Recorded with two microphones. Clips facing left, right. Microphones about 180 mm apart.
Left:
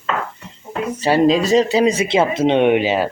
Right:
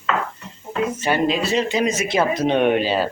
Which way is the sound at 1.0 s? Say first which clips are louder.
Left 8 dB; 35° left (ahead or behind).